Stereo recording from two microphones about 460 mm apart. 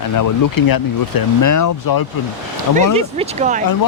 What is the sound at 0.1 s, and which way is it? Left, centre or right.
Speech, left.